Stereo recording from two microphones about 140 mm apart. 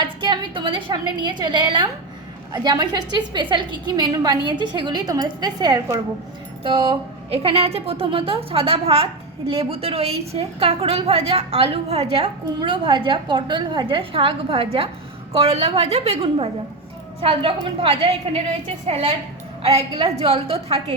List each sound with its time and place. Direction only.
0.0 s a woman's voice: 35° right (ahead or behind)
12.5 s a woman's voice: 35° right (ahead or behind)